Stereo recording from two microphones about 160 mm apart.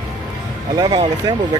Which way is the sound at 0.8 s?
25° right (ahead or behind).